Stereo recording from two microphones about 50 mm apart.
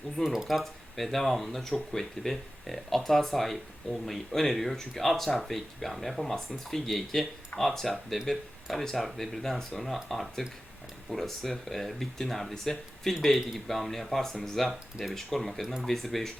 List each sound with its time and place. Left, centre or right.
0.3 s speech: centre